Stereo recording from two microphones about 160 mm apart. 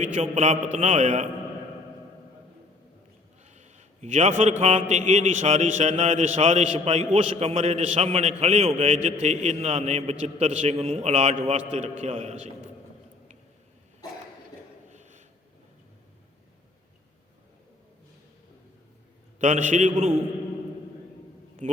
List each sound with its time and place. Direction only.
0.0 s a man's voice: 45° right (ahead or behind)
3.4 s a man's voice: 45° right (ahead or behind)
14.8 s a sound: 50° right (ahead or behind)
19.4 s a man's voice: 50° right (ahead or behind)
21.6 s speech: 45° right (ahead or behind)